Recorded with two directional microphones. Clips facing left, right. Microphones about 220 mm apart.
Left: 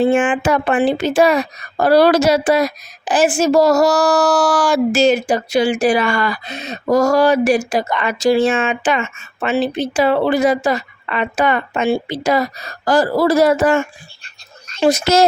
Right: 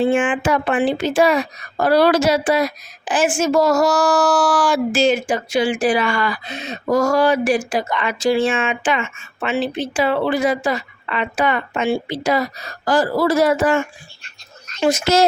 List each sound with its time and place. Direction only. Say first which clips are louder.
0.0 s speech: left 3 dB; 45° left (ahead or behind)